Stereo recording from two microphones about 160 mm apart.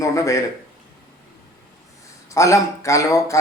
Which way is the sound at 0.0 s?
20° left (ahead or behind).